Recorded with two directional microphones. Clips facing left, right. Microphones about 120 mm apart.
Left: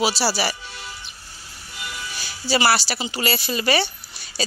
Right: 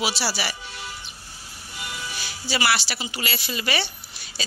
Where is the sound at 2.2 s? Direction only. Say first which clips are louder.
Left 6 dB; 35° left (ahead or behind).